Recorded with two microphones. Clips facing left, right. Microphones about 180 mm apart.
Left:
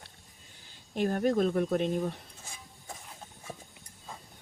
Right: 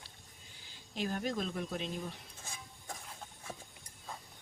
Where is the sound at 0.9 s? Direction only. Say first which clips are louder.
Left 9 dB; 50° left (ahead or behind).